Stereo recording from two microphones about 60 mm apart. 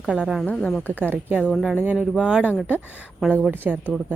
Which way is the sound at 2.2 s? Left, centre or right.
Centre.